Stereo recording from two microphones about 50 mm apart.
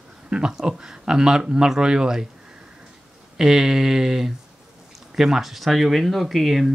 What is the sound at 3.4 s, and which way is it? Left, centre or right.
Speech, centre.